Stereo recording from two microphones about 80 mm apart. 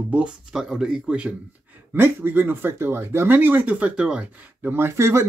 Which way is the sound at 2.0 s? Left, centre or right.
Right.